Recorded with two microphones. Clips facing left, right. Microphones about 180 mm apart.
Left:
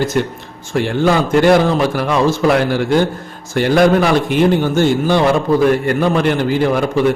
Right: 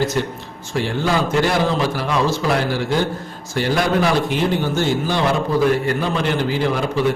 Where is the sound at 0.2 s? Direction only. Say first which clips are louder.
Left 4 dB; 55° left (ahead or behind).